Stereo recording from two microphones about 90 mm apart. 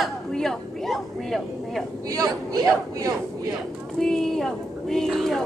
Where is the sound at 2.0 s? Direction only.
40° right (ahead or behind).